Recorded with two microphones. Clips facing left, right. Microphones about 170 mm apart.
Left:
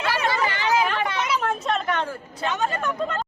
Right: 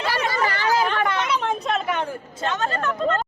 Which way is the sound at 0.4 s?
35° right (ahead or behind).